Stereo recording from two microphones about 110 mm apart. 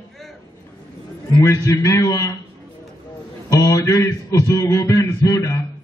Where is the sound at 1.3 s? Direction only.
30° left (ahead or behind).